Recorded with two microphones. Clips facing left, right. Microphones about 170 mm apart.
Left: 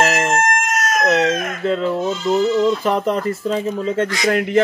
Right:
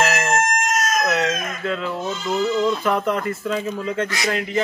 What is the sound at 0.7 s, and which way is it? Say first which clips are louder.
Chicken: left 1 dB; 60° left (ahead or behind).